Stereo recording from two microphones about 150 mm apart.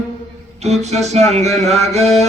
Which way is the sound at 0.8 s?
45° right (ahead or behind).